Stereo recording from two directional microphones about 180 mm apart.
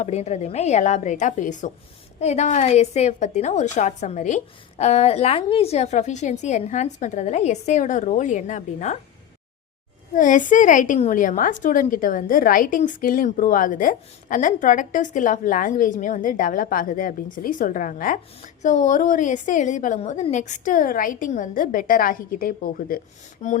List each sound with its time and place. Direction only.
0.0 s a woman's voice: 40° left (ahead or behind)
10.2 s a woman's voice: 45° left (ahead or behind)